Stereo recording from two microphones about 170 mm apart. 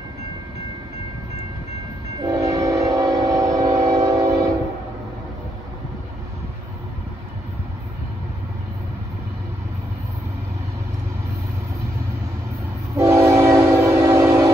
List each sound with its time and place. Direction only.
2.2 s train: 20° right (ahead or behind)
12.9 s train: 15° right (ahead or behind)